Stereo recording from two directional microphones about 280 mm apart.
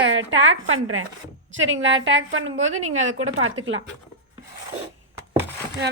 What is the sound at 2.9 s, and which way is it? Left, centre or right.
Speech, right.